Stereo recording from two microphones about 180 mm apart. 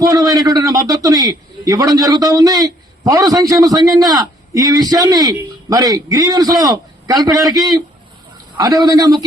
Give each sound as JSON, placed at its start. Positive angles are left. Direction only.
{"t": 0.0, "sound": "a man's voice", "side_deg": -20}